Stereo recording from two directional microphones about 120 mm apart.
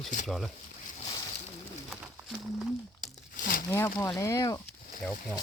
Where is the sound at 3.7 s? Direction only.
25° left (ahead or behind).